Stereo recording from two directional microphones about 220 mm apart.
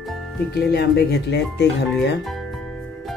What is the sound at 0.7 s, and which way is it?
Speech, 50° left (ahead or behind).